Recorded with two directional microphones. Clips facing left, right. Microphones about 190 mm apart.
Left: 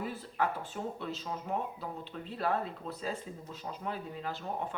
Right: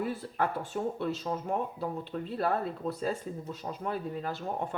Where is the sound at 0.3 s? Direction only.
45° right (ahead or behind).